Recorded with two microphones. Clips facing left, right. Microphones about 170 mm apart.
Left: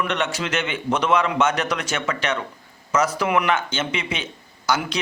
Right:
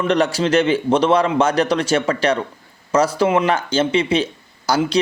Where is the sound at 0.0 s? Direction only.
35° right (ahead or behind).